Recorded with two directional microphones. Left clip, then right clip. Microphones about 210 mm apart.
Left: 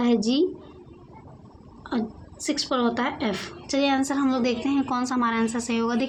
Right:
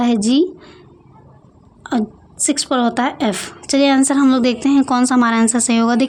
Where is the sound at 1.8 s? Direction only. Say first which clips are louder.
Right 9 dB; 60° right (ahead or behind).